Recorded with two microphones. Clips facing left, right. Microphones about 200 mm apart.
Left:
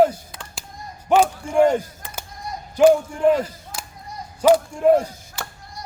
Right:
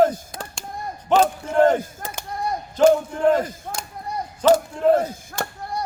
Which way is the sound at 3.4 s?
50° right (ahead or behind).